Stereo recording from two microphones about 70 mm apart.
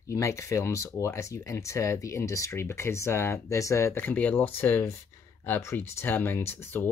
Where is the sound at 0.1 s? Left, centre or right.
Left.